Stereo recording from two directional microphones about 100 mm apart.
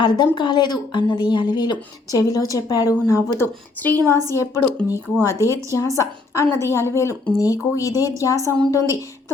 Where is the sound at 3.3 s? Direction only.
20° left (ahead or behind).